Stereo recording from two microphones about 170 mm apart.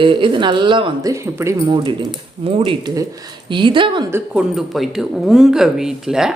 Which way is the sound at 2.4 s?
35° right (ahead or behind).